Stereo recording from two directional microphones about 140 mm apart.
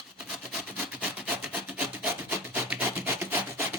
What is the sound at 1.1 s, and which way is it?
Rub, 10° right (ahead or behind).